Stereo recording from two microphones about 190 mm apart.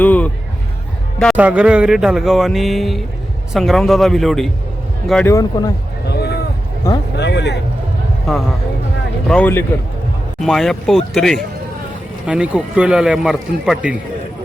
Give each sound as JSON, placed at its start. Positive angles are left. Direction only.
{"t": 0.0, "sound": "a sound", "side_deg": 10}
{"t": 1.4, "sound": "a man's voice", "side_deg": -5}
{"t": 5.3, "sound": "a man's voice", "side_deg": 20}
{"t": 6.1, "sound": "a sound", "side_deg": 60}
{"t": 6.8, "sound": "a man's voice", "side_deg": 20}
{"t": 7.2, "sound": "speech", "side_deg": 65}
{"t": 8.3, "sound": "a man's voice", "side_deg": 0}